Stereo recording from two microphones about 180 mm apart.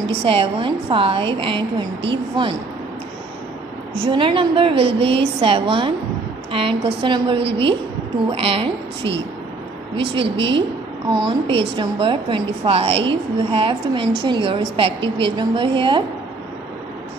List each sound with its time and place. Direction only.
0.0 s a woman's voice: 30° right (ahead or behind)
4.0 s a woman's voice: 30° right (ahead or behind)
10.1 s a woman's voice: 30° right (ahead or behind)